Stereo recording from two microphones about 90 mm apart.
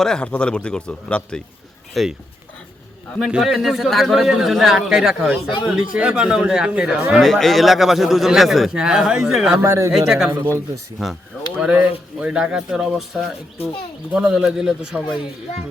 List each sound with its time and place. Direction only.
0.0 s a man's voice: 10° left (ahead or behind)
1.9 s speech: centre (ahead or behind)
3.2 s a man's voice: 5° right (ahead or behind)
5.4 s speech: 70° left (ahead or behind)
5.6 s a man's voice: 10° right (ahead or behind)
9.6 s speech: 30° right (ahead or behind)
9.9 s a man's voice: 5° right (ahead or behind)
11.6 s speech: 10° right (ahead or behind)